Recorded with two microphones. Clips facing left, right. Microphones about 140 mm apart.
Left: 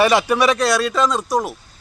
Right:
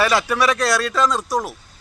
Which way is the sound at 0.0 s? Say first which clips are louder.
Left 3 dB; 20° left (ahead or behind).